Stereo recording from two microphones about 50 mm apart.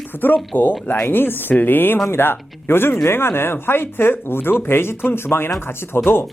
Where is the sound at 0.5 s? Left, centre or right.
Left.